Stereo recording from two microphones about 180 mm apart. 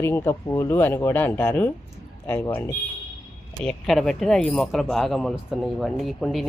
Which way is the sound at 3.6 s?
Centre (ahead or behind).